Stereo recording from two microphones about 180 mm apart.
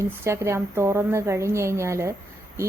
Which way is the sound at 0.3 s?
15° right (ahead or behind).